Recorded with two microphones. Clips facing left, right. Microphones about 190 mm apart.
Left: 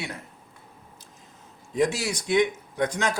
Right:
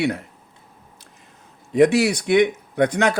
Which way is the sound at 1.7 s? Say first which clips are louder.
Right 9 dB; 65° right (ahead or behind).